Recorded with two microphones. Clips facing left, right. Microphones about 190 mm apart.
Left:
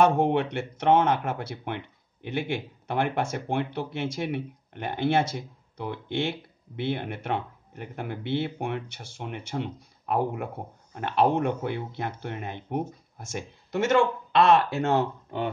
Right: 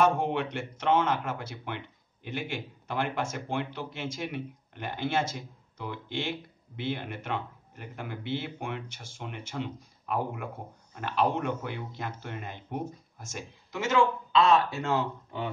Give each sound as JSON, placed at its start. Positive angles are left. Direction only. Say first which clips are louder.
{"t": 0.0, "sound": "speech", "louder": "left 4 dB", "side_deg": 60}
{"t": 14.9, "sound": "speech", "louder": "left 4 dB", "side_deg": 50}